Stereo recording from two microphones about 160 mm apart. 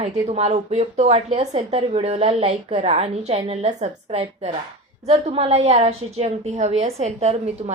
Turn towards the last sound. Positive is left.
turn(degrees=-40)  # may be behind; listen again after turning